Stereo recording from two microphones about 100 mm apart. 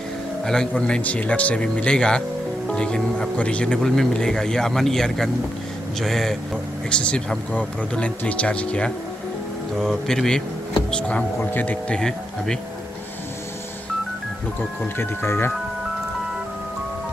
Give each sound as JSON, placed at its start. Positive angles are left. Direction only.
{"t": 0.5, "sound": "speech", "side_deg": 10}
{"t": 15.0, "sound": "speech", "side_deg": 25}